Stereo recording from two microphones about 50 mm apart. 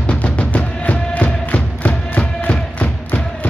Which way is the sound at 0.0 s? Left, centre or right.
Left.